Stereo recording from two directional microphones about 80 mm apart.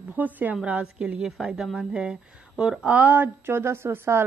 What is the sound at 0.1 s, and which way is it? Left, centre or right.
A woman's voice, right.